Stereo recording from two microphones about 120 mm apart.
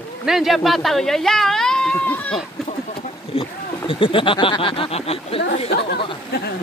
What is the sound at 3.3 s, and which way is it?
Speech, 50° left (ahead or behind).